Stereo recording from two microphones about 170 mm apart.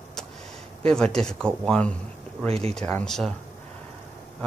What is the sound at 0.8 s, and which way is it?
Speech, 5° left (ahead or behind).